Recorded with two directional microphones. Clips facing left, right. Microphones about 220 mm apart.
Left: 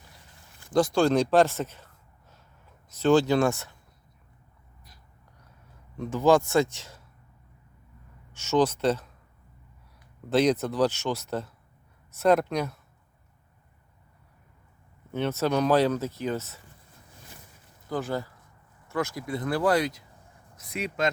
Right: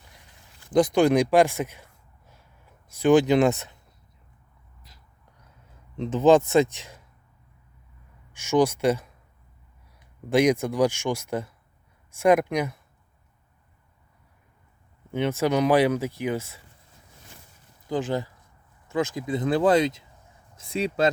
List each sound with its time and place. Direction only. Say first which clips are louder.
0.7 s speech: right 3 dB; 20° right (ahead or behind)
6.0 s speech: right 3 dB; 20° right (ahead or behind)
8.3 s speech: right 2 dB; 15° right (ahead or behind)
10.2 s speech: right 2 dB; 10° right (ahead or behind)
15.1 s speech: right 2 dB; 10° right (ahead or behind)
17.8 s speech: right 3 dB; 15° right (ahead or behind); by 21.1 s 30° right (ahead or behind)